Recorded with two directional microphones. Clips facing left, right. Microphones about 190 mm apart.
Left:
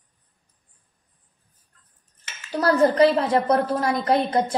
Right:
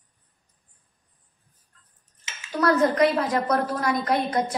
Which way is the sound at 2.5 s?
30° left (ahead or behind).